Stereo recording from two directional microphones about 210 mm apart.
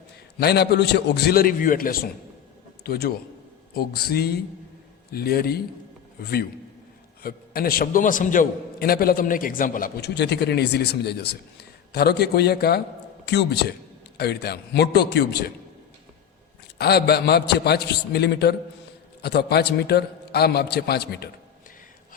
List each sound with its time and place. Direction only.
0.3 s a man's voice: 50° left (ahead or behind)
7.2 s a man's voice: 45° left (ahead or behind)
16.7 s a man's voice: 50° left (ahead or behind)